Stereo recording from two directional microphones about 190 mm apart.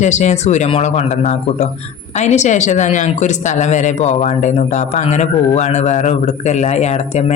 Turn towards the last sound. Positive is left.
turn(degrees=35)  # may be behind; listen again after turning